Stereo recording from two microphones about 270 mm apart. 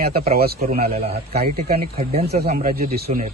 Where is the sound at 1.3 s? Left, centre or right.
Right.